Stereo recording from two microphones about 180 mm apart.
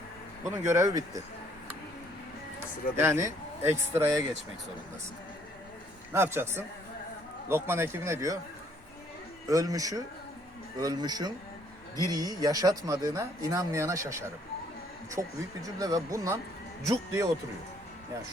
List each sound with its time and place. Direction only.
0.4 s speech: 15° right (ahead or behind)
3.0 s speech: 15° right (ahead or behind)
6.1 s speech: 15° right (ahead or behind)
9.5 s speech: 20° right (ahead or behind)